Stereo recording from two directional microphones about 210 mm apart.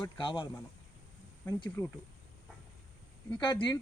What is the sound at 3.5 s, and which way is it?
Speech, 20° left (ahead or behind).